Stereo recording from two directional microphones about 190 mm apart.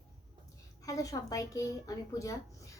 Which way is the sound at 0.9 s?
15° left (ahead or behind).